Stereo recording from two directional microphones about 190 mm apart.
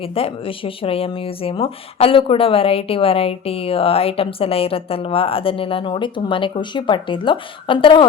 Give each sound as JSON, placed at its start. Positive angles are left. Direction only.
{"t": 0.0, "sound": "speech", "side_deg": 30}